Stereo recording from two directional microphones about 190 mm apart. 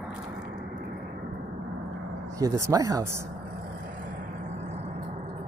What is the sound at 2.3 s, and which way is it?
Speech, 15° right (ahead or behind).